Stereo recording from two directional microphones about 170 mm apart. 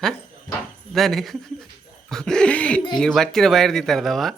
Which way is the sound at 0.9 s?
Centre (ahead or behind).